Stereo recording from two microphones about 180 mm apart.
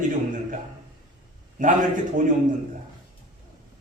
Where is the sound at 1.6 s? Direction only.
45° right (ahead or behind).